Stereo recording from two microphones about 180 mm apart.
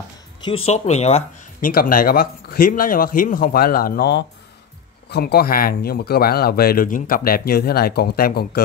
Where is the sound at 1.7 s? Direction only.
50° left (ahead or behind).